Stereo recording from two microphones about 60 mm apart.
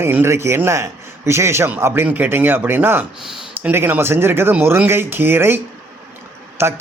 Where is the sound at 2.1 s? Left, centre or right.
Right.